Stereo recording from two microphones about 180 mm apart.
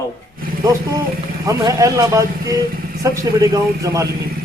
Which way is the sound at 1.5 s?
15° right (ahead or behind).